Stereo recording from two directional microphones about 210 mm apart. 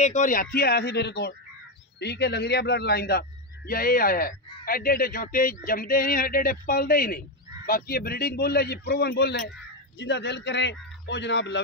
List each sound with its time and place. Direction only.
0.0 s a man's voice: 35° left (ahead or behind); by 11.6 s 55° left (ahead or behind)